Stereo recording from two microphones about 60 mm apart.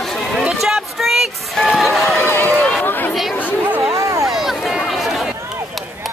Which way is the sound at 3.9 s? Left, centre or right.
Right.